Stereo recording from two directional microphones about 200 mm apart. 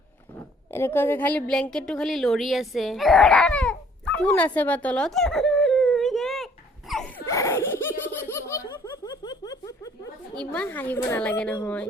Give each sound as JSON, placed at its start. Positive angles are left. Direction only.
{"t": 0.3, "sound": "speech", "side_deg": 10}
{"t": 7.3, "sound": "laughter", "side_deg": 15}
{"t": 10.3, "sound": "a woman's voice", "side_deg": 5}